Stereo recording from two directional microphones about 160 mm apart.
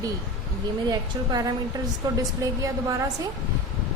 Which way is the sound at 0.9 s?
25° right (ahead or behind).